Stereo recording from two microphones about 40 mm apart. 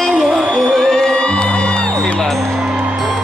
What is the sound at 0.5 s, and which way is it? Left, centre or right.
Music, centre.